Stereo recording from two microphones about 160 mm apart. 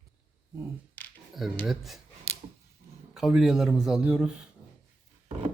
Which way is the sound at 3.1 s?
5° right (ahead or behind).